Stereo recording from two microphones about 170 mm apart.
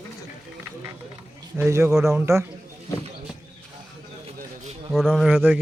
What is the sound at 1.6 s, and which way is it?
Speech, 15° right (ahead or behind).